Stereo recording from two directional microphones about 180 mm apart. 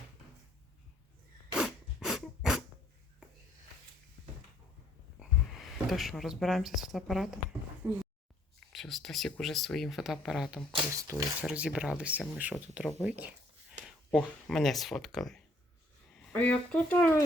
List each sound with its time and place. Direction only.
1.5 s a sound: 5° right (ahead or behind)
5.2 s speech: centre (ahead or behind)
7.8 s speech: 10° right (ahead or behind)
8.7 s speech: centre (ahead or behind)
10.9 s speech: 15° right (ahead or behind)
11.4 s speech: 5° right (ahead or behind); by 17.2 s 10° left (ahead or behind)